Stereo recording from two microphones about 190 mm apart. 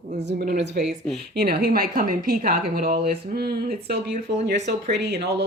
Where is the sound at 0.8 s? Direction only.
Centre (ahead or behind).